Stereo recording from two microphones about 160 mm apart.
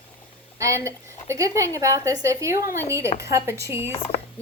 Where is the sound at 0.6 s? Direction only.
20° right (ahead or behind).